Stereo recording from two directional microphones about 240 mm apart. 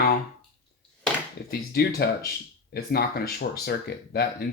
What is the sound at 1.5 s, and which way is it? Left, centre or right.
Speech, left.